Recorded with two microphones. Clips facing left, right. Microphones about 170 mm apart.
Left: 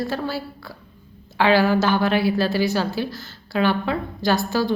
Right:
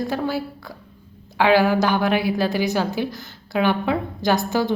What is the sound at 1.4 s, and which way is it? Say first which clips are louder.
A woman's voice: right 1 dB; 15° right (ahead or behind).